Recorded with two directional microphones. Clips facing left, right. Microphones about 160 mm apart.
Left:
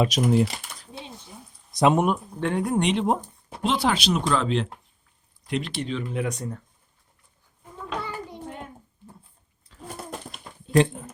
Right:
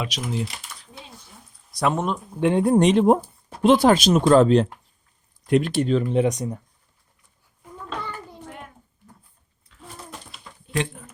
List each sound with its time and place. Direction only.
0.0 s speech: 50° left (ahead or behind)
0.5 s typing: 30° left (ahead or behind)
1.3 s a sound: 20° left (ahead or behind)
2.4 s speech: 25° right (ahead or behind)
2.7 s speech: 40° right (ahead or behind)
6.1 s speech: 25° right (ahead or behind)
7.9 s a sound: 10° left (ahead or behind)
9.7 s bird: 35° left (ahead or behind)
10.3 s a sound: 40° left (ahead or behind)